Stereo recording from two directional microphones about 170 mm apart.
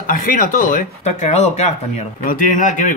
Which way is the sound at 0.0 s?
55° left (ahead or behind).